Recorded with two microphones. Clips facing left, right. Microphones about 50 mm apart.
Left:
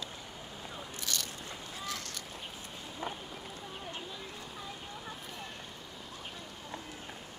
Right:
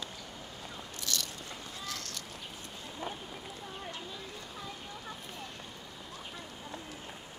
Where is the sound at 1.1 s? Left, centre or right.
Centre.